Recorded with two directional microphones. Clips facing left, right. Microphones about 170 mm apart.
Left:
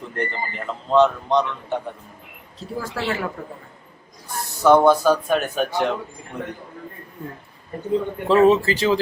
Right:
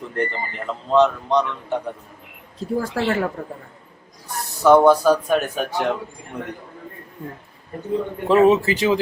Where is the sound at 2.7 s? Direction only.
50° right (ahead or behind).